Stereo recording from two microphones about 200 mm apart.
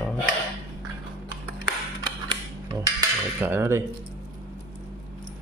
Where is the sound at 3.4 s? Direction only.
10° right (ahead or behind).